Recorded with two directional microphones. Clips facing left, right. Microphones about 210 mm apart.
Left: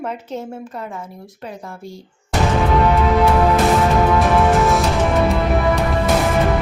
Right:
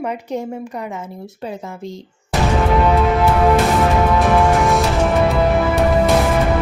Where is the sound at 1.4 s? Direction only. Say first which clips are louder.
Right 4 dB; 25° right (ahead or behind).